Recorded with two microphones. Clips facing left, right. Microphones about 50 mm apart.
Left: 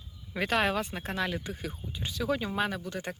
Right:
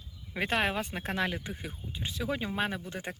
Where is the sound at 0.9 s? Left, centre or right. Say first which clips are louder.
Even; right.